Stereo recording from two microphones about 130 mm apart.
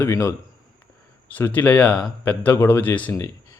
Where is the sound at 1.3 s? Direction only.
15° left (ahead or behind).